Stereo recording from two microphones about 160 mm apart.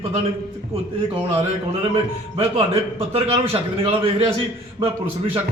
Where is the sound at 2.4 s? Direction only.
40° right (ahead or behind).